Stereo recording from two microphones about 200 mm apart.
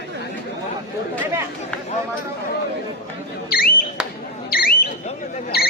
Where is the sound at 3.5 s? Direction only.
50° left (ahead or behind).